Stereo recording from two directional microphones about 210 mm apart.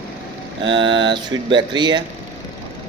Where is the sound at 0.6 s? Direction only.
60° right (ahead or behind).